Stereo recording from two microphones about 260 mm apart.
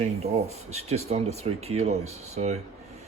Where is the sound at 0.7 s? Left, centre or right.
Right.